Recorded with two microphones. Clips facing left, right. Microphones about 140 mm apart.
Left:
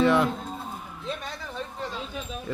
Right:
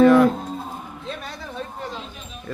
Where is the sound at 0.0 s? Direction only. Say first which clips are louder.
Right 8 dB; 25° left (ahead or behind).